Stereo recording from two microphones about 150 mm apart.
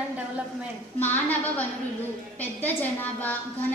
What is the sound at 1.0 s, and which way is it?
A woman's voice, 10° left (ahead or behind).